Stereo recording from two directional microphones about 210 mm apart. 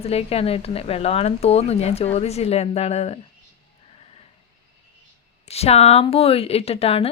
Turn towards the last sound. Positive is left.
turn(degrees=30)  # may be behind; listen again after turning